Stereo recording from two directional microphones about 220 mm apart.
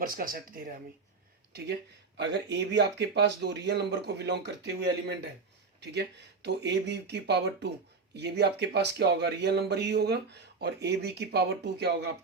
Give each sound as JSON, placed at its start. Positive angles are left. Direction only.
{"t": 0.0, "sound": "speech", "side_deg": -40}
{"t": 2.1, "sound": "speech", "side_deg": -50}